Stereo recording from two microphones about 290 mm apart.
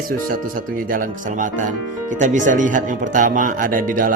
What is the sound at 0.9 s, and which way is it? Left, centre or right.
Speech, right.